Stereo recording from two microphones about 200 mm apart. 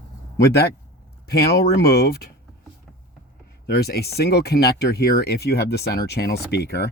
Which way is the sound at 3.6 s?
50° left (ahead or behind).